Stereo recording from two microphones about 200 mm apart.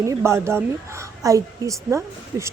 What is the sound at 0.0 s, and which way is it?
Speech, 15° right (ahead or behind).